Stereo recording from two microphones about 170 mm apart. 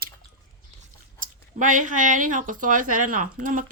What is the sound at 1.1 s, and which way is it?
Speech, 50° right (ahead or behind).